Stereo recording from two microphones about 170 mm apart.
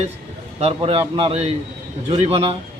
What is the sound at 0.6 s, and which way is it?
Speech, 35° right (ahead or behind).